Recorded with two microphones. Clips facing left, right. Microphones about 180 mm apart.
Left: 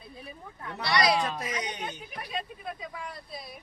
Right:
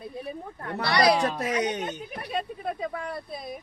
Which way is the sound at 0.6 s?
55° right (ahead or behind).